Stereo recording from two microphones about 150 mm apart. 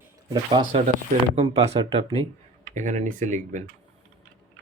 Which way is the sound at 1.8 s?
35° right (ahead or behind).